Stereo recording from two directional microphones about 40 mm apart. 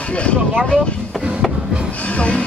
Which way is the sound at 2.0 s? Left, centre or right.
Left.